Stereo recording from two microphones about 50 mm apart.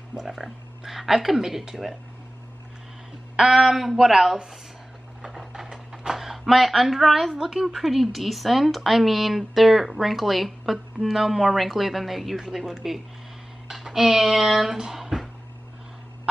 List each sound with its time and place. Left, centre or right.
0.2 s speech: centre
3.3 s a woman's voice: centre